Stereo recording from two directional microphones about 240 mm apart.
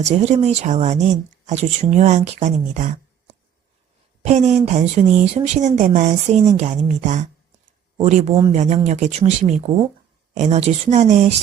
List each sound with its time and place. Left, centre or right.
0.0 s speech: right